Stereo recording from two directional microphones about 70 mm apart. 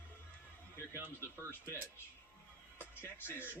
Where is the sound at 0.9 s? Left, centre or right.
Right.